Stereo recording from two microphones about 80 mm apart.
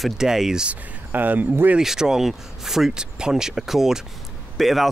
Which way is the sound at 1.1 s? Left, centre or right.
Right.